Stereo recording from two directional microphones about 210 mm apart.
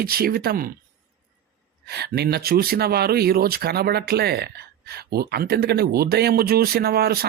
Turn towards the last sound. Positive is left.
turn(degrees=-50)  # may be behind; listen again after turning